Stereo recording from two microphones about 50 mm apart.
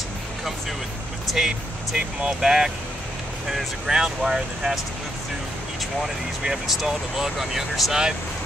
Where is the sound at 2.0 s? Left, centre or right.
Right.